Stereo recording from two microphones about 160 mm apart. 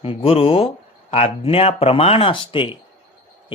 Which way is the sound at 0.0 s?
35° left (ahead or behind).